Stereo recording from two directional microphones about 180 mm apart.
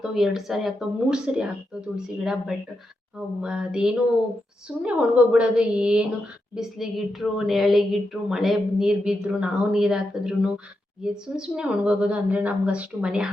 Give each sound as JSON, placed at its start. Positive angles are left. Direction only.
{"t": 0.0, "sound": "a woman's voice", "side_deg": 0}